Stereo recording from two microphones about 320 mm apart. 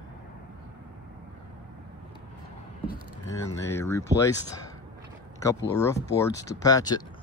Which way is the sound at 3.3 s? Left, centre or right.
Centre.